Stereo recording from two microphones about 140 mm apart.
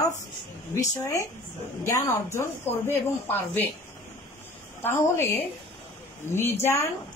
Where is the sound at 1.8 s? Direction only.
20° left (ahead or behind).